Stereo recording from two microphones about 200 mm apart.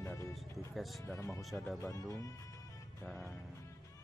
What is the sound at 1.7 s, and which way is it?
Speech, 15° left (ahead or behind).